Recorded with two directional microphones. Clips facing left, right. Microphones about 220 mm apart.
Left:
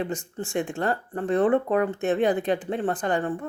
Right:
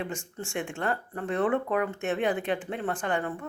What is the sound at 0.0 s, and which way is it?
Speech, 35° left (ahead or behind).